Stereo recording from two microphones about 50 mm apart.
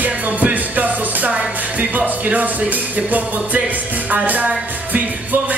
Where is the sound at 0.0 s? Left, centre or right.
Right.